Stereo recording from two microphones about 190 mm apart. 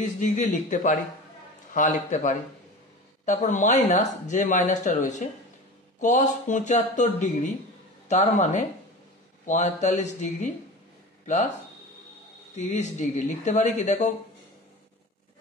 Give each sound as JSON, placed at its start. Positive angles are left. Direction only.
{"t": 0.0, "sound": "speech", "side_deg": 40}
{"t": 12.5, "sound": "speech", "side_deg": 40}